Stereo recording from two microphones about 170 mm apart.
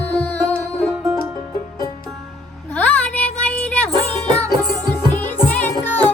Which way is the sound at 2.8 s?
10° left (ahead or behind).